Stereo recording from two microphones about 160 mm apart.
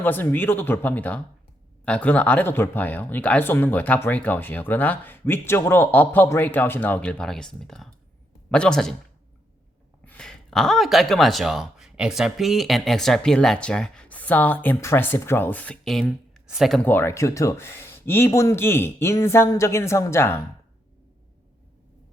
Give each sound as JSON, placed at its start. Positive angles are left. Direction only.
{"t": 0.0, "sound": "speech", "side_deg": 10}
{"t": 10.1, "sound": "speech", "side_deg": 5}
{"t": 16.8, "sound": "speech", "side_deg": 15}